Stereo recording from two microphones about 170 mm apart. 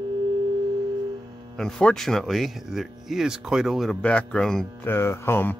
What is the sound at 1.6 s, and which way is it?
Speech, 5° left (ahead or behind).